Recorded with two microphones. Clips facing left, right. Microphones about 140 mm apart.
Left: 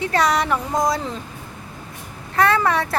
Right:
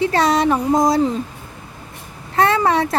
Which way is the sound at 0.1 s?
25° right (ahead or behind).